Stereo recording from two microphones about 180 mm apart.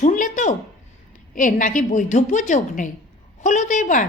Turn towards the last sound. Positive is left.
turn(degrees=45)  # may be behind; listen again after turning